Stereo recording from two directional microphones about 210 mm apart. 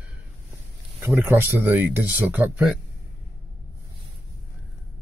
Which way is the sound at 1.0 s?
10° right (ahead or behind).